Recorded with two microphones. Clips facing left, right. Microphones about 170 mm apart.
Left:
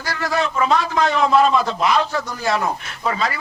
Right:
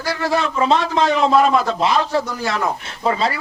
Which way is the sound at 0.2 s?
30° right (ahead or behind).